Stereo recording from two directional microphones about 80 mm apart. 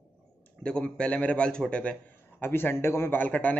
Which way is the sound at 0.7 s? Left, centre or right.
Centre.